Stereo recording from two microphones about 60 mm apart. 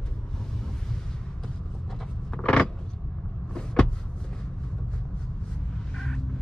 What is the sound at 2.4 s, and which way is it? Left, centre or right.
Vehicle, centre.